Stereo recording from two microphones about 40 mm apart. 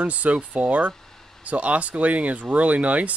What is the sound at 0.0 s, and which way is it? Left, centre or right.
Speech, right.